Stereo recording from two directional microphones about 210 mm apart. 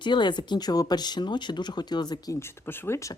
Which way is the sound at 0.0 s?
20° left (ahead or behind).